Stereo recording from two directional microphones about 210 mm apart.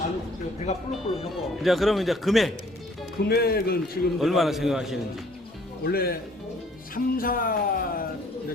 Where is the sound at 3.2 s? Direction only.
50° left (ahead or behind).